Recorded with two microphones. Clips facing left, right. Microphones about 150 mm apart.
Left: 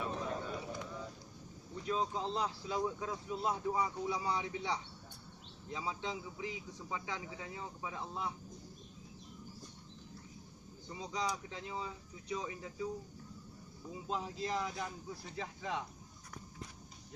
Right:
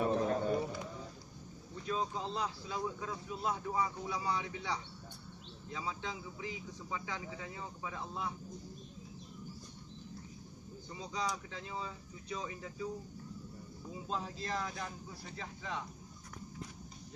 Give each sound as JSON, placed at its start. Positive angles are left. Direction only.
{"t": 0.0, "sound": "a sound", "side_deg": -50}
{"t": 1.9, "sound": "speech", "side_deg": 20}
{"t": 11.1, "sound": "speech", "side_deg": 20}
{"t": 14.1, "sound": "speech", "side_deg": 15}